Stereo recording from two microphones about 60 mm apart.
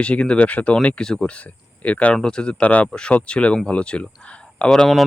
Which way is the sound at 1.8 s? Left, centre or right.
Left.